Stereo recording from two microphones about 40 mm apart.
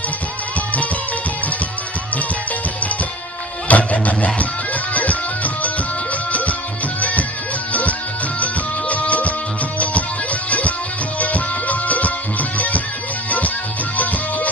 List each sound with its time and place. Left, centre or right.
3.6 s music: left
7.0 s music: left
8.4 s music: left
11.1 s music: left